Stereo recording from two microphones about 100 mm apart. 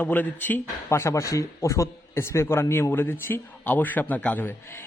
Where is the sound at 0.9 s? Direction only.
30° left (ahead or behind).